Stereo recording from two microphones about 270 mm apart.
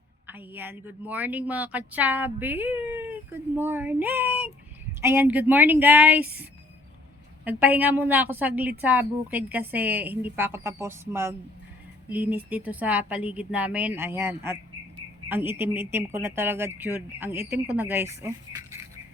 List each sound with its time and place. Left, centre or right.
0.3 s speech: centre